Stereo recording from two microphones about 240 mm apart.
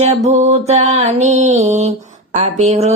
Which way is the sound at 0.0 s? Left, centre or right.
Right.